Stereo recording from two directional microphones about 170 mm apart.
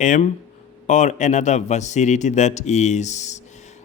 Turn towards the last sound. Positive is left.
turn(degrees=45)  # may be behind; listen again after turning